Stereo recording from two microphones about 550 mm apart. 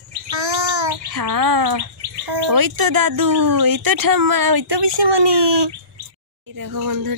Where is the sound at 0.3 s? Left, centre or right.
Right.